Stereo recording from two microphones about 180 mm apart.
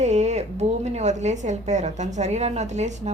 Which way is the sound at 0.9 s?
40° right (ahead or behind).